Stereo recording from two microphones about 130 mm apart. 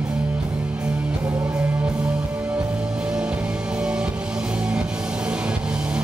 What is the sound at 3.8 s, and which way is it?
Music, 5° right (ahead or behind).